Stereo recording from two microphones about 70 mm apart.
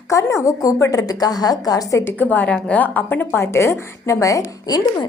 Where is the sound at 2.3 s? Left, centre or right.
Centre; by 4.8 s left.